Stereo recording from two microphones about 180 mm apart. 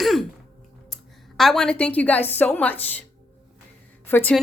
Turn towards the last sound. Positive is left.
turn(degrees=10)  # may be behind; listen again after turning